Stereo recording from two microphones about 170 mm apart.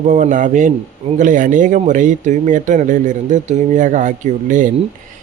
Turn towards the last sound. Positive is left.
turn(degrees=-50)  # may be behind; listen again after turning